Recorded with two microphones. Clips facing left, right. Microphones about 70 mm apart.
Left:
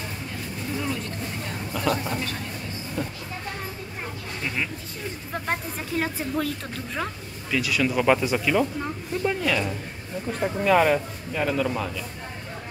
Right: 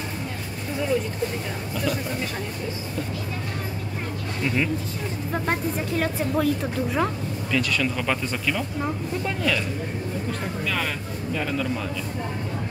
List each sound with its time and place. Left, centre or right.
1.8 s speech: centre
4.4 s speech: centre
7.5 s speech: centre
10.4 s speech: left
11.3 s speech: centre